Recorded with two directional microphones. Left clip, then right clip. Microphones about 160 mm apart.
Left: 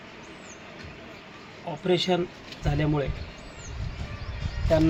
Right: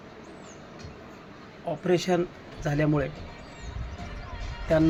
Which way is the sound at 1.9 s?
15° right (ahead or behind).